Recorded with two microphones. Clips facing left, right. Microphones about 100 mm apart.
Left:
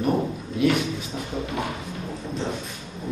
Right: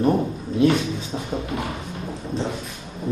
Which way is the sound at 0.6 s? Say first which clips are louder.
Right 3 dB; 25° right (ahead or behind).